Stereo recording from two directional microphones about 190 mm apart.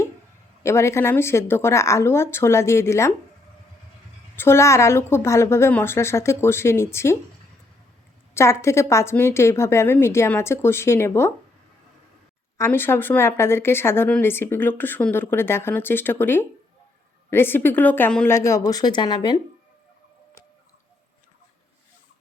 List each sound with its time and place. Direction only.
0.6 s speech: 15° left (ahead or behind)
4.4 s speech: 15° left (ahead or behind)
8.3 s speech: 15° left (ahead or behind)
12.5 s speech: 10° left (ahead or behind)